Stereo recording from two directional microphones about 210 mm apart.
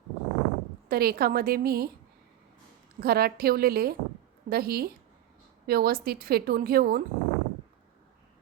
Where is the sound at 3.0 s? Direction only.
45° right (ahead or behind).